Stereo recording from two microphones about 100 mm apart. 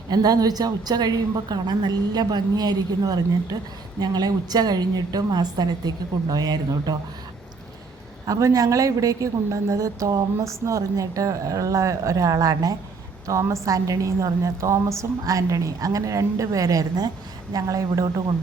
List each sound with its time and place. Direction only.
0.1 s a woman's voice: 40° right (ahead or behind)
8.3 s a woman's voice: 35° right (ahead or behind)